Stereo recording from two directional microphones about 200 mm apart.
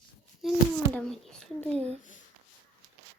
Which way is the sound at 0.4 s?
Centre (ahead or behind).